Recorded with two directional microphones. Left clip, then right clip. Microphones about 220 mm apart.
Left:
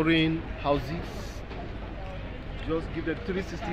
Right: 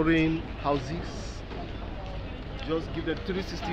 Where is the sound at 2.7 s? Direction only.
40° left (ahead or behind).